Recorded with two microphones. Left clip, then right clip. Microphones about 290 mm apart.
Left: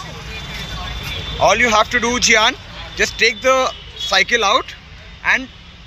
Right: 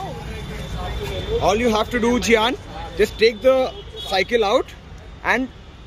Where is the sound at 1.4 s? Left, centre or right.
Centre.